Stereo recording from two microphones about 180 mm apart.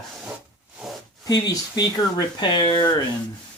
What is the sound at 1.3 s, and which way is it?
Speech, 20° left (ahead or behind).